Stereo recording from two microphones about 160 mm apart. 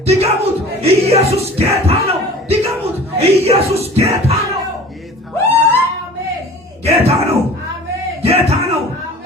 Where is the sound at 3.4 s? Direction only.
40° right (ahead or behind).